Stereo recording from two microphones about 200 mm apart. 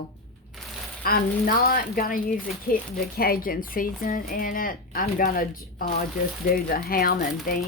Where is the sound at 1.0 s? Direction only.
50° left (ahead or behind).